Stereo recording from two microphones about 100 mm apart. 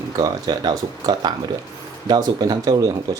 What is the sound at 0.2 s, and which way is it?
Speech, 40° right (ahead or behind).